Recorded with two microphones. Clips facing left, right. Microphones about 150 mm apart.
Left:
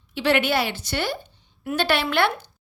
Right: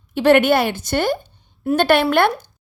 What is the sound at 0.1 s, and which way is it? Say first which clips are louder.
A woman's voice: right 8 dB; 50° right (ahead or behind).